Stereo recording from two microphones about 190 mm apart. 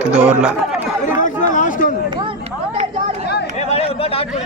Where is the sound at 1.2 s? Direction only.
40° left (ahead or behind).